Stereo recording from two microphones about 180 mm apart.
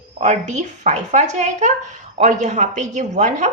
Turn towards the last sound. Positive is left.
turn(degrees=-45)  # may be behind; listen again after turning